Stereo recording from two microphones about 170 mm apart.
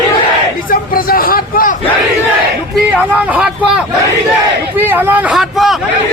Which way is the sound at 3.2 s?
5° right (ahead or behind).